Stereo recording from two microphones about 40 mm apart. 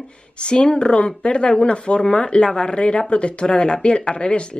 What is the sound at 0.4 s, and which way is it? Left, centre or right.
Speech, left.